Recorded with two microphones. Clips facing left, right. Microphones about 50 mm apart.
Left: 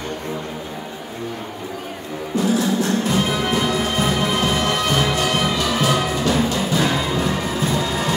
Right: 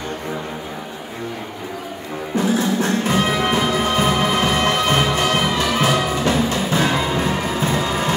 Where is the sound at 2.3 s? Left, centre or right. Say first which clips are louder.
Even; right.